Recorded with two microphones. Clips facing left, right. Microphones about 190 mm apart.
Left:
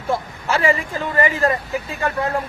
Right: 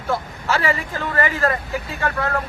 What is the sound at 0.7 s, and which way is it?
Speech, 20° left (ahead or behind).